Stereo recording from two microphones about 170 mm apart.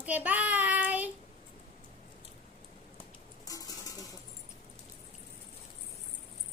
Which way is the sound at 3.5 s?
20° left (ahead or behind).